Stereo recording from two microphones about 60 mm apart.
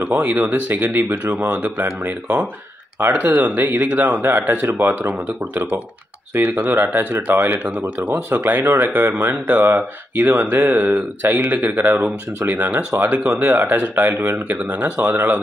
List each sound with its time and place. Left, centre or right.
0.0 s speech: right